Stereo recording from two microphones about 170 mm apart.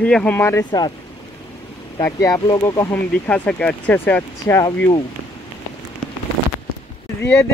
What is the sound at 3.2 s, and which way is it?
Speech, 5° left (ahead or behind).